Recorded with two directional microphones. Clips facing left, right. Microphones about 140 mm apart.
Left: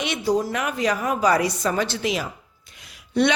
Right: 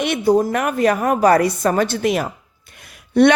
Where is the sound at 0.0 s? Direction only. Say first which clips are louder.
Right 7 dB; 55° right (ahead or behind).